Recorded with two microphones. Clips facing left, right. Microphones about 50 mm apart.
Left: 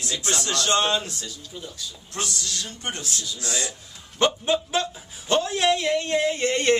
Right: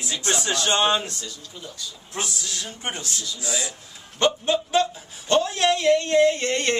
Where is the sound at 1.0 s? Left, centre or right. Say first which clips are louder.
Right 1 dB; centre.